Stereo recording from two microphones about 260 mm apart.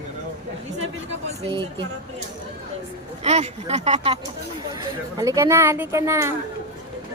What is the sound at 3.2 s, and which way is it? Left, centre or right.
Speech, right.